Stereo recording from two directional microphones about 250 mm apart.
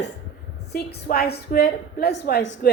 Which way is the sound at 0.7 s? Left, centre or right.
Left.